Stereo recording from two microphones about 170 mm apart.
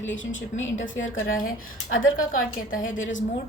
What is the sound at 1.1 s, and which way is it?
Speech, 55° left (ahead or behind).